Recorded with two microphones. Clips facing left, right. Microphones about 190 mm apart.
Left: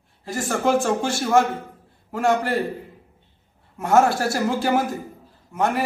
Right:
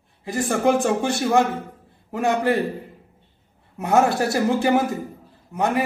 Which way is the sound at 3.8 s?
15° right (ahead or behind).